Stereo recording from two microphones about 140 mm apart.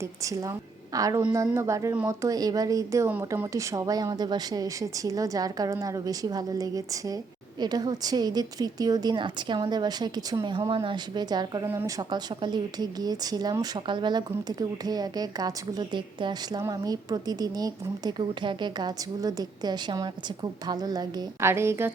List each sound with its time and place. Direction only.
0.0 s a woman's voice: 25° right (ahead or behind)